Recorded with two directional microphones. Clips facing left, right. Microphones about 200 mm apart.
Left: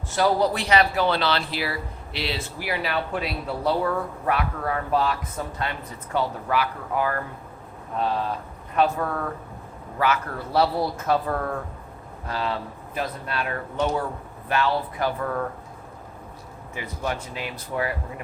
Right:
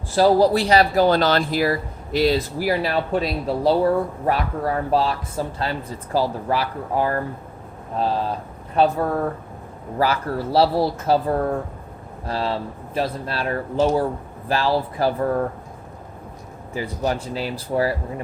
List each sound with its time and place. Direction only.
0.1 s speech: 30° right (ahead or behind)
16.7 s speech: 35° right (ahead or behind)